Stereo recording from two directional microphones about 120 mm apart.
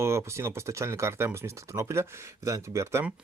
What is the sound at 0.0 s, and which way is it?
Speech, 25° right (ahead or behind).